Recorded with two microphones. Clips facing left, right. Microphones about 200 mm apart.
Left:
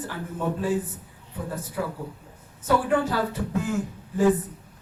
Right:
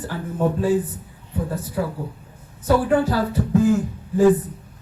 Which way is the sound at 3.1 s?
35° right (ahead or behind).